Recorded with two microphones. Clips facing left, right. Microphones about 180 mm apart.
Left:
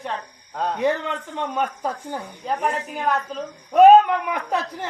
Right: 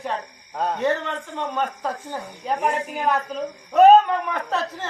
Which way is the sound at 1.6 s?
10° left (ahead or behind).